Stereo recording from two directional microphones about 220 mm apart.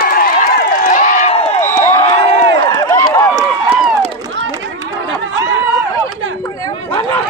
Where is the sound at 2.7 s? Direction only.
15° left (ahead or behind).